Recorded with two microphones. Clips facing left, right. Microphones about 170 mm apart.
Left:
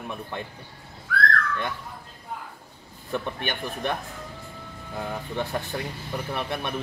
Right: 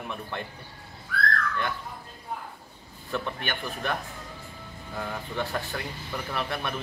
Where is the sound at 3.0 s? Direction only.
20° left (ahead or behind).